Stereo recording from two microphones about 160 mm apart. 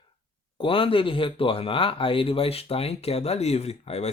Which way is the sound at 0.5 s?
35° left (ahead or behind).